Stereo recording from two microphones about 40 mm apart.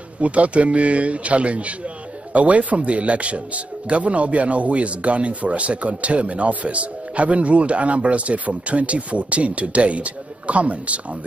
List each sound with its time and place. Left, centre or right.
0.2 s speech: right